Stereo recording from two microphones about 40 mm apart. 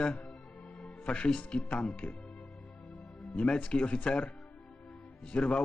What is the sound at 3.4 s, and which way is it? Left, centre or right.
Speech, left.